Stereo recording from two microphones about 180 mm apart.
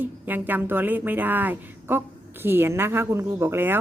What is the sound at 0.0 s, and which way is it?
A woman's voice, 10° right (ahead or behind).